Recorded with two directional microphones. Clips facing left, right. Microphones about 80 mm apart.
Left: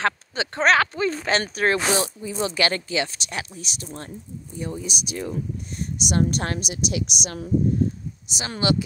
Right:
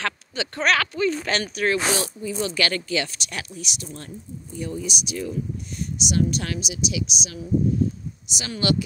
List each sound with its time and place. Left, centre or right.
0.0 s speech: left
8.3 s speech: left